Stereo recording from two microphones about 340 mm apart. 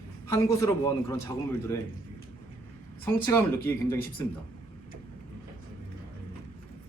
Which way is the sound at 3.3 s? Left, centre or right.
Centre.